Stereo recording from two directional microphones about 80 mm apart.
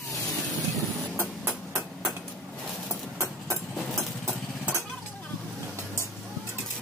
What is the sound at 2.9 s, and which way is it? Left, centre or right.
Music, right.